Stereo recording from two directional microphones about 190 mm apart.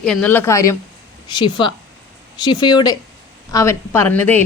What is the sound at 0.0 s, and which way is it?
A woman's voice, 5° left (ahead or behind).